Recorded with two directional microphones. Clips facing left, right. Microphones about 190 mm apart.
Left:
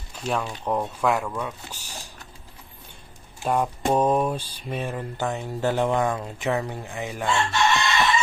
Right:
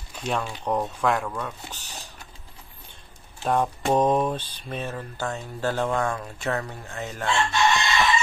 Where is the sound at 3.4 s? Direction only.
10° left (ahead or behind).